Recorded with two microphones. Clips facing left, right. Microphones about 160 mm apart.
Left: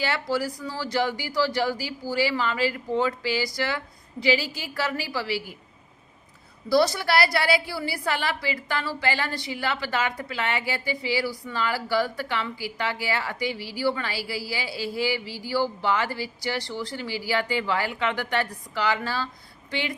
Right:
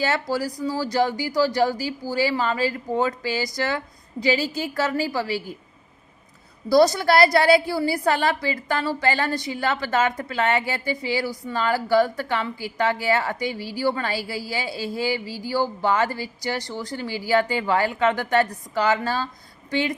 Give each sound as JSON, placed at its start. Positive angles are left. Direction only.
{"t": 0.0, "sound": "speech", "side_deg": -40}
{"t": 6.7, "sound": "speech", "side_deg": -45}